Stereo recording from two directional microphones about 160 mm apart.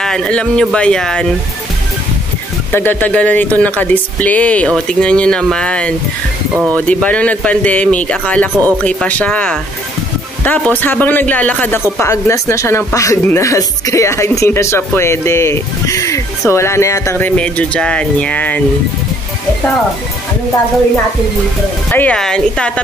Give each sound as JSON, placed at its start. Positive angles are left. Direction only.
{"t": 0.0, "sound": "speech", "side_deg": 5}
{"t": 2.7, "sound": "speech", "side_deg": 10}
{"t": 21.9, "sound": "speech", "side_deg": 5}